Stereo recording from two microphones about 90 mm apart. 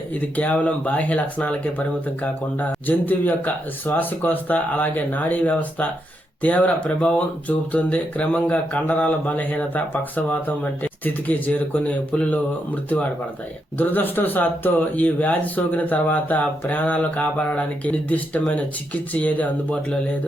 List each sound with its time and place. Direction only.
0.1 s speech: 20° left (ahead or behind)